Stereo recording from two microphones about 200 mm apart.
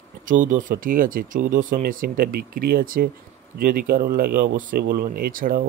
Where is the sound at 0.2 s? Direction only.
40° right (ahead or behind).